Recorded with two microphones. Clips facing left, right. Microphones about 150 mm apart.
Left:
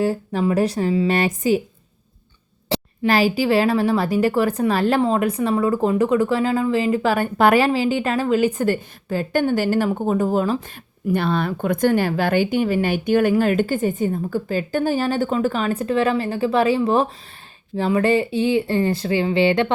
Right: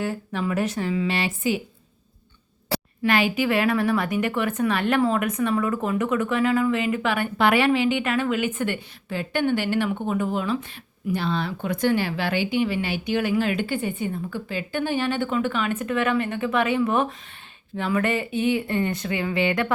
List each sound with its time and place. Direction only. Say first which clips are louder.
0.0 s a woman's voice: left 7 dB; 35° left (ahead or behind)
2.6 s a sound: left 4 dB; 20° left (ahead or behind)
3.1 s a woman's voice: left 4 dB; 35° left (ahead or behind)
11.1 s a woman's voice: left 5 dB; 55° left (ahead or behind); by 19.7 s 30° left (ahead or behind)